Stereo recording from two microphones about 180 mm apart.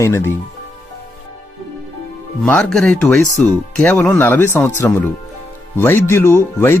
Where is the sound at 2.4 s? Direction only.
5° left (ahead or behind).